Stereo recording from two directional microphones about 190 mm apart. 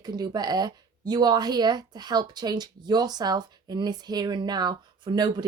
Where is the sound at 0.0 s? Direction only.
20° right (ahead or behind).